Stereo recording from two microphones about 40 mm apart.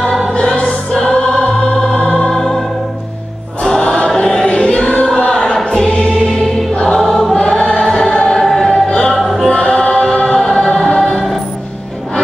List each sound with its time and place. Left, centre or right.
0.7 s music: centre
3.6 s choir: left
4.2 s choir: centre
5.3 s choir: centre
5.7 s choir: left
6.7 s music: centre
7.1 s choir: centre
7.3 s choir: centre
9.1 s music: centre
9.5 s choir: left; by 10.7 s centre
10.7 s choir: centre